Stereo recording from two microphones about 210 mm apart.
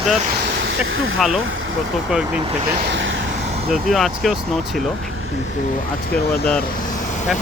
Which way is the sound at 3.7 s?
Centre (ahead or behind).